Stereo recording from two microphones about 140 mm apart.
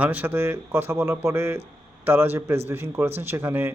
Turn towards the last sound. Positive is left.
turn(degrees=-15)  # may be behind; listen again after turning